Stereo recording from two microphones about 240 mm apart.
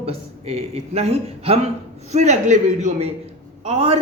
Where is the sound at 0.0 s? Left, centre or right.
Right.